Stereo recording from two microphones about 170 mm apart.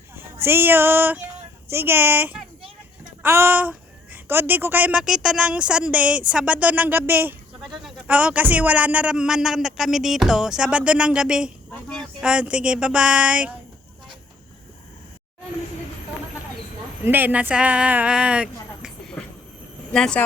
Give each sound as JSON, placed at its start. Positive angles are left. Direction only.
{"t": 0.4, "sound": "a woman's voice", "side_deg": -15}
{"t": 7.6, "sound": "a woman's voice", "side_deg": 0}
{"t": 17.1, "sound": "a woman's voice", "side_deg": -10}
{"t": 19.9, "sound": "speech", "side_deg": 5}